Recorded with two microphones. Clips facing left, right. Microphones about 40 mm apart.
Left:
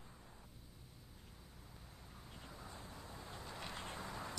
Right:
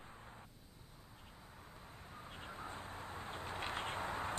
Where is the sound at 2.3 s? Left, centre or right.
Right.